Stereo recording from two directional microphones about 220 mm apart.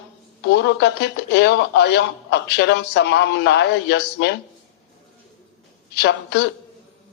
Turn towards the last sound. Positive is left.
turn(degrees=50)  # may be behind; listen again after turning